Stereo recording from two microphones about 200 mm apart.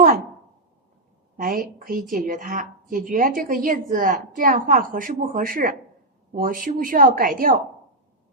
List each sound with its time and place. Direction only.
1.4 s a woman's voice: 45° right (ahead or behind)